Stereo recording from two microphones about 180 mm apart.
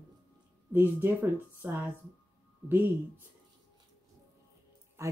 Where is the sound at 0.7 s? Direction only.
10° right (ahead or behind).